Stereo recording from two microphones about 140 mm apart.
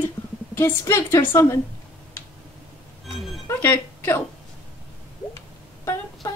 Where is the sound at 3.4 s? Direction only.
15° left (ahead or behind).